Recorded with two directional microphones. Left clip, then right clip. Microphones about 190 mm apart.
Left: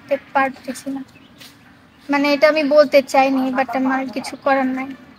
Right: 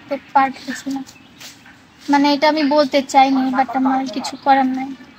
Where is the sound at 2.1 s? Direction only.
35° left (ahead or behind).